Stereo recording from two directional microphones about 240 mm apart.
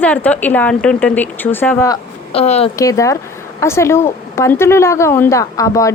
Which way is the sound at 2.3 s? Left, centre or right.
Left.